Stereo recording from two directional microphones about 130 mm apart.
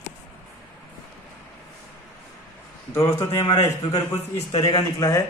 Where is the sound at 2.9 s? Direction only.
20° left (ahead or behind).